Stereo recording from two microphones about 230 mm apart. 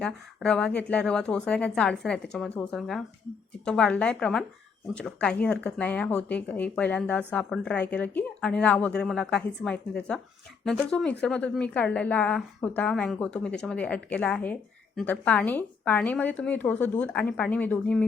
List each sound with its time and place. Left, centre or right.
0.0 s a woman's voice: centre